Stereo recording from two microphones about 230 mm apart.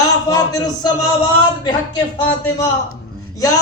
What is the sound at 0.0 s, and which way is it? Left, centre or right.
A man's voice, centre.